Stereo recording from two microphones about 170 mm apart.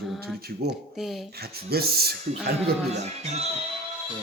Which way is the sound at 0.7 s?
Centre (ahead or behind).